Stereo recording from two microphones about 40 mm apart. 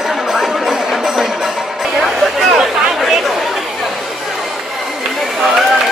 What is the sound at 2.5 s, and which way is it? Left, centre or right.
Chatter, centre.